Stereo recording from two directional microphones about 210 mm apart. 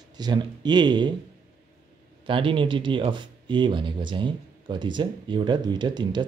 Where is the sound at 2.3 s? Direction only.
25° right (ahead or behind).